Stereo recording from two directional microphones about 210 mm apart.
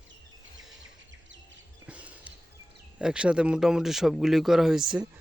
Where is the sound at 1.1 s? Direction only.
60° right (ahead or behind).